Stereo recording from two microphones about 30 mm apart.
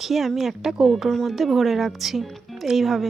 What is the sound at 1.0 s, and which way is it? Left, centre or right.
Speech, centre.